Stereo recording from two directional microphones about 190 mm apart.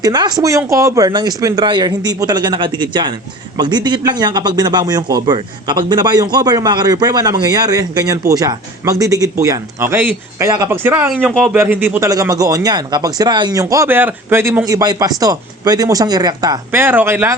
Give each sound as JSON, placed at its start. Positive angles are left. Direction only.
{"t": 0.0, "sound": "speech", "side_deg": -20}